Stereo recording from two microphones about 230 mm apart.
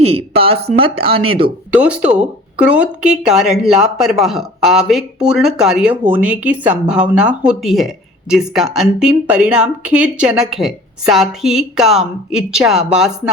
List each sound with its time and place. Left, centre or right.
0.0 s speech: right
1.7 s speech: centre